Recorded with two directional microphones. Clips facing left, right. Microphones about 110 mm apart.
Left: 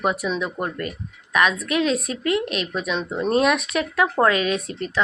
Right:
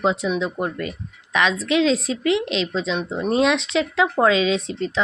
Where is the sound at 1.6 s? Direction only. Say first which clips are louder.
Right 3 dB; 90° right.